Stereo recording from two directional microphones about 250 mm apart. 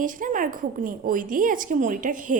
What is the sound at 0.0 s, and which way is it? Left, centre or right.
A woman's voice, right.